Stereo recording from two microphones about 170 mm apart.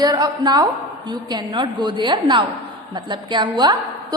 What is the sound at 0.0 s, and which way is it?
A woman's voice, 25° right (ahead or behind).